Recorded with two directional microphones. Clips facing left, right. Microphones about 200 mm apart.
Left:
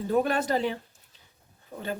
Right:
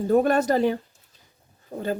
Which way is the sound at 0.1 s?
45° right (ahead or behind).